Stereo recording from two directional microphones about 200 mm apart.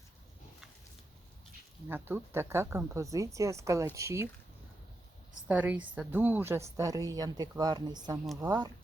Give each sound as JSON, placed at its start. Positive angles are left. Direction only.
{"t": 1.9, "sound": "a woman's voice", "side_deg": -10}
{"t": 5.5, "sound": "a woman's voice", "side_deg": -5}